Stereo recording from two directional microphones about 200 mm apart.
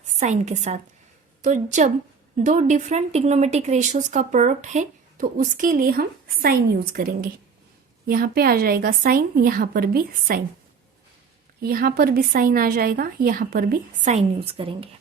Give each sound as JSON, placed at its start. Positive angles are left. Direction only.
{"t": 0.2, "sound": "a woman's voice", "side_deg": -35}
{"t": 11.6, "sound": "a woman's voice", "side_deg": -50}